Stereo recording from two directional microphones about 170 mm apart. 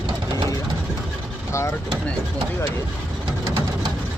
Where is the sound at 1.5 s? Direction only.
15° left (ahead or behind).